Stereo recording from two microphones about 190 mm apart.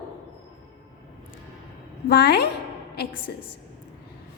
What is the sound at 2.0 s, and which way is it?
Speech, 60° left (ahead or behind).